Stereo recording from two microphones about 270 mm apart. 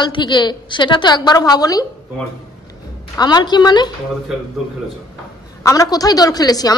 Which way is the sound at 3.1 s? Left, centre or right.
Centre.